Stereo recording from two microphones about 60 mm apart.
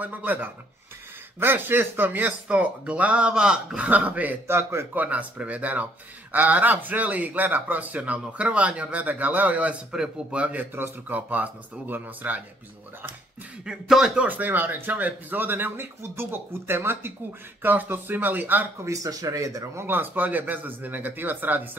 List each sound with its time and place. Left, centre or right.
0.0 s speech: right
4.5 s a man's voice: right
4.9 s speech: right
9.9 s speech: centre; by 12.4 s right
13.7 s speech: centre
14.1 s speech: right
18.9 s speech: right
19.8 s speech: right